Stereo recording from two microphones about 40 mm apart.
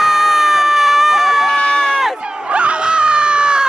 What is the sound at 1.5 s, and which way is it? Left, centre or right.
Run, centre.